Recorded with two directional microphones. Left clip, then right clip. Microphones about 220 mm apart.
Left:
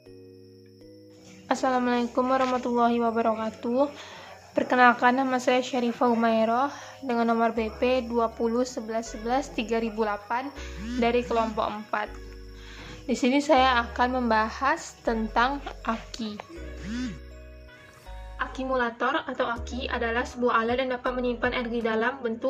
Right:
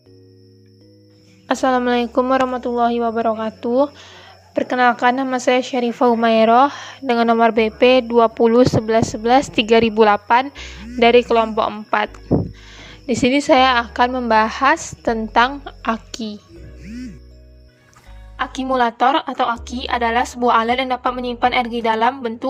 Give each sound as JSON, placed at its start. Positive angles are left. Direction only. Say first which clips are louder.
{"t": 1.5, "sound": "speech", "louder": "right 8 dB", "side_deg": -30}
{"t": 18.3, "sound": "a woman's voice", "louder": "right 9 dB", "side_deg": -50}